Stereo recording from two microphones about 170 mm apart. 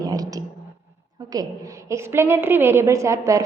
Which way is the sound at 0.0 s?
20° right (ahead or behind).